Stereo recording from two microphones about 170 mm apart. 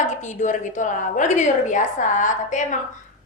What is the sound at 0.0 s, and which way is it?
A woman's voice, 45° left (ahead or behind).